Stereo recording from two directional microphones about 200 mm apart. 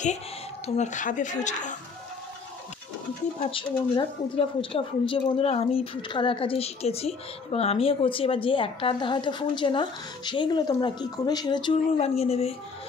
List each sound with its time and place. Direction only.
0.7 s a woman's voice: 35° left (ahead or behind)
3.3 s a woman's voice: 25° left (ahead or behind)